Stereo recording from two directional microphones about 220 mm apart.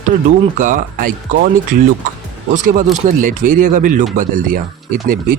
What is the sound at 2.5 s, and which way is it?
Speech, 35° right (ahead or behind).